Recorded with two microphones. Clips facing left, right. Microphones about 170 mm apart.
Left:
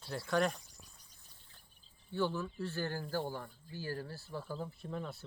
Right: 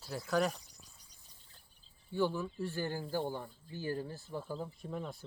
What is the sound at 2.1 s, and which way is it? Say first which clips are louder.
Speech: right 2 dB; 15° right (ahead or behind).